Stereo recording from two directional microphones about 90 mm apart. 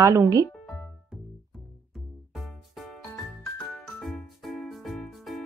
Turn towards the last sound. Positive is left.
turn(degrees=0)  # may be behind; listen again after turning